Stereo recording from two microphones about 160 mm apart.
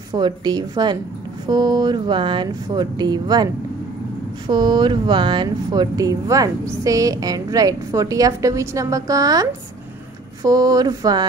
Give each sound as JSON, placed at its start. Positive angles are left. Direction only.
{"t": 0.1, "sound": "speech", "side_deg": -25}
{"t": 4.5, "sound": "speech", "side_deg": -25}